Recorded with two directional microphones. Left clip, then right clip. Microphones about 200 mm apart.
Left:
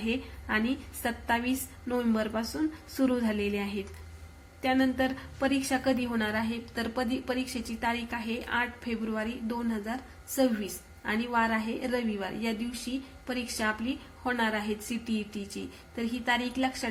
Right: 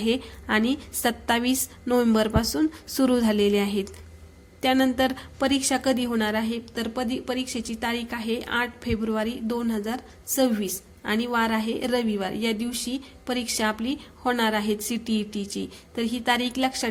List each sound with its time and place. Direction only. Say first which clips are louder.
0.0 s a woman's voice: right 7 dB; 35° right (ahead or behind)